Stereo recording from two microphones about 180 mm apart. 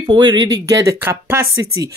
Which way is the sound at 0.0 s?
25° right (ahead or behind).